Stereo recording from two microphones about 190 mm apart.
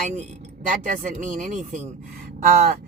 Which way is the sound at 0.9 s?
45° right (ahead or behind).